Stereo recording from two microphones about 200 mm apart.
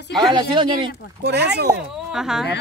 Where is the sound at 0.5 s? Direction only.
25° right (ahead or behind).